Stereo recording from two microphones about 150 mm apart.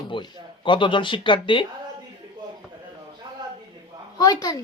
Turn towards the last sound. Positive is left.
turn(degrees=25)  # may be behind; listen again after turning